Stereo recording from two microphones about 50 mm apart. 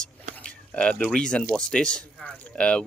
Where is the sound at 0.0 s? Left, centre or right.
Centre.